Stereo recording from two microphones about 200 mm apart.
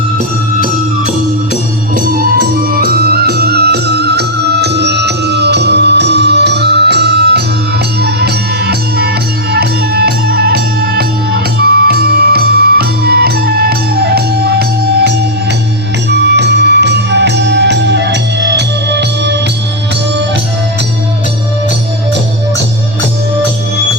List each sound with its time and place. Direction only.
2.0 s music: 45° right (ahead or behind)
16.1 s music: 60° right (ahead or behind)